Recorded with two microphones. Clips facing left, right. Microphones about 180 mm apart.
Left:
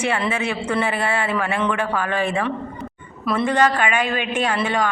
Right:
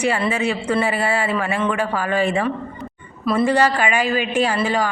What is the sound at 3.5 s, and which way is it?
Speech, 10° right (ahead or behind).